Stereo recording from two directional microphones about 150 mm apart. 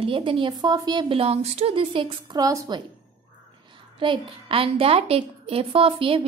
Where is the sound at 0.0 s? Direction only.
35° right (ahead or behind).